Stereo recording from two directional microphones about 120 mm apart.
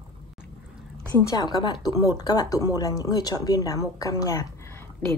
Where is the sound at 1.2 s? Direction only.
30° left (ahead or behind).